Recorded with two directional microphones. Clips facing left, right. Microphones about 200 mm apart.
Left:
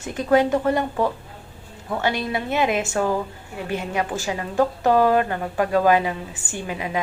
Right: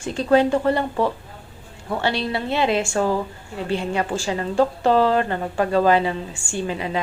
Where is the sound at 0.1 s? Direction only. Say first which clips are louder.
Right 1 dB; 15° left (ahead or behind).